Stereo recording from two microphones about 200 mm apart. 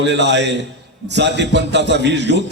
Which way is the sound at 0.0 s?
60° right (ahead or behind).